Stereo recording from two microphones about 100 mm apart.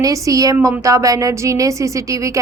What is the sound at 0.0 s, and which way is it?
A woman's voice, 35° right (ahead or behind).